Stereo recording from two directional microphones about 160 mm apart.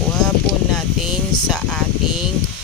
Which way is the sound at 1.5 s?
5° left (ahead or behind).